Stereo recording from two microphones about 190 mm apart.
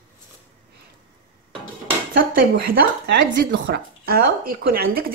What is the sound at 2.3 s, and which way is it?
Speech, 50° right (ahead or behind).